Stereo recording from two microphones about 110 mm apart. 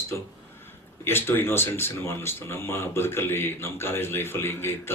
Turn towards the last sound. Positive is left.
turn(degrees=20)  # may be behind; listen again after turning